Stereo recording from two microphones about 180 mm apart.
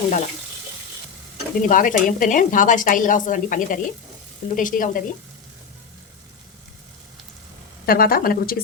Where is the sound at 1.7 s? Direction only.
50° left (ahead or behind).